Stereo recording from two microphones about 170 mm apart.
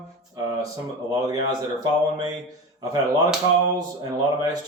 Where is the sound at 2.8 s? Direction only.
20° right (ahead or behind).